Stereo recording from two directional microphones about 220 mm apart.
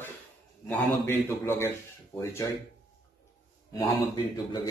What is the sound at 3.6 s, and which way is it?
Speech, 15° left (ahead or behind).